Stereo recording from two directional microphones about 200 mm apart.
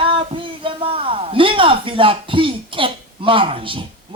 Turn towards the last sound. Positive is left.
turn(degrees=-25)  # may be behind; listen again after turning